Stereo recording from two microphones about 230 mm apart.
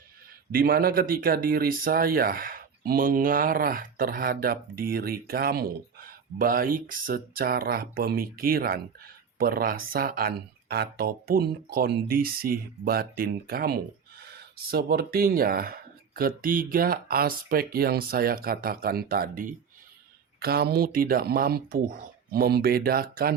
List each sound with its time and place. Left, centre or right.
0.5 s speech: right